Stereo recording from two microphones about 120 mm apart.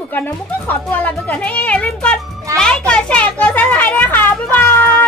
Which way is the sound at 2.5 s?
5° left (ahead or behind).